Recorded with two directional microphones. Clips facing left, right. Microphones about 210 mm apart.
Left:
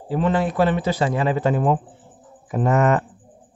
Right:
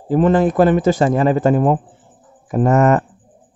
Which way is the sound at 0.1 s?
45° right (ahead or behind).